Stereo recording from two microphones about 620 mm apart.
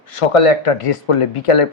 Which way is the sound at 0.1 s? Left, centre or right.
Left.